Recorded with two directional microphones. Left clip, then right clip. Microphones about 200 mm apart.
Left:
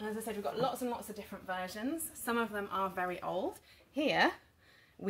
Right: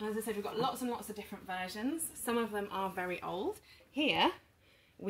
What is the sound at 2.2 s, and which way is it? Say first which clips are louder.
A woman's voice: even; 20° left (ahead or behind).